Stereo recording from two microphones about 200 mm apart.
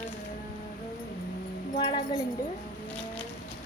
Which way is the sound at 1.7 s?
30° left (ahead or behind).